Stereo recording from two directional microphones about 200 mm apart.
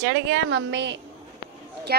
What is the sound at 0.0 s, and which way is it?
A woman's voice, 60° right (ahead or behind).